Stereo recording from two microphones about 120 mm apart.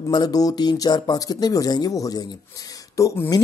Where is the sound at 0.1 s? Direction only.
35° left (ahead or behind).